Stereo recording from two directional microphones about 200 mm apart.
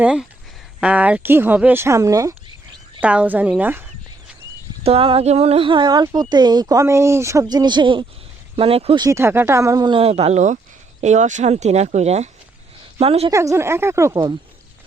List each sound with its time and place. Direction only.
0.0 s speech: 5° right (ahead or behind)
3.0 s speech: 5° right (ahead or behind)
4.8 s speech: 30° right (ahead or behind)
9.0 s speech: 10° right (ahead or behind); by 13.3 s 30° right (ahead or behind)
13.3 s speech: 15° right (ahead or behind)